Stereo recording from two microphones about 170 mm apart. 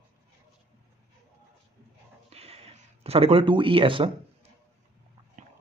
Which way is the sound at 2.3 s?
35° right (ahead or behind).